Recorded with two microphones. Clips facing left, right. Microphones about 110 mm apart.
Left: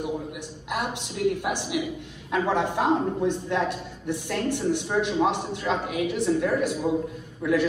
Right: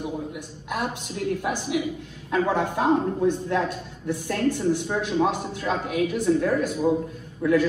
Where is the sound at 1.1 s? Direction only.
20° left (ahead or behind).